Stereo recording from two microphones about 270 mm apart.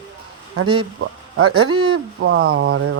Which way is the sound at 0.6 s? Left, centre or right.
Right.